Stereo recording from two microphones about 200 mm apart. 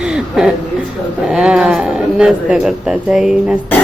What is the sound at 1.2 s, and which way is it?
A man's voice, 5° right (ahead or behind).